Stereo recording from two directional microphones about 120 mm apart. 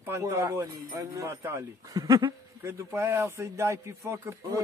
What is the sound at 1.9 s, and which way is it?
Speech, 35° right (ahead or behind).